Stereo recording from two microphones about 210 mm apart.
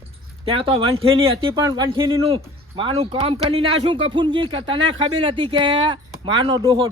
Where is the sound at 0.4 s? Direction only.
25° right (ahead or behind).